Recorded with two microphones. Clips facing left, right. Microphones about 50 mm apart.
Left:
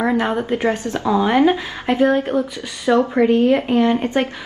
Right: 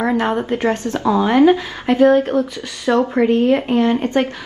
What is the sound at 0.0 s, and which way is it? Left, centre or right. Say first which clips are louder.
Speech: right 1 dB; centre.